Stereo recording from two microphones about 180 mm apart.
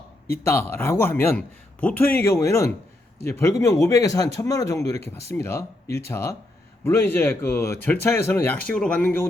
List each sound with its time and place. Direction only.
0.4 s speech: 15° left (ahead or behind)